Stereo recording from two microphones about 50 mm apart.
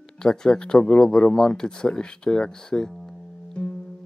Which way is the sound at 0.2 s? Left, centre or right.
Centre.